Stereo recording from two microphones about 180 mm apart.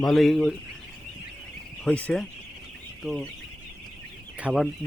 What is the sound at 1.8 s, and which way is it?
Speech, 10° left (ahead or behind).